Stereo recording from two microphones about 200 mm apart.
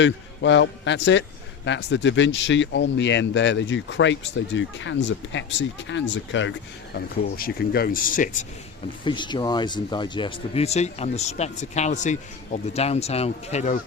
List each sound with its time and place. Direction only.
0.0 s speech: 65° left (ahead or behind)
6.9 s a man's voice: 50° left (ahead or behind)
9.0 s speech: 25° left (ahead or behind)